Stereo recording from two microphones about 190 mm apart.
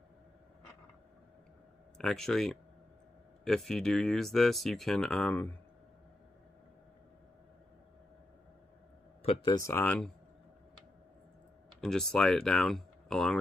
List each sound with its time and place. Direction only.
2.0 s speech: centre (ahead or behind)
9.2 s speech: 30° left (ahead or behind)
9.7 s speech: 10° left (ahead or behind)
11.8 s speech: centre (ahead or behind)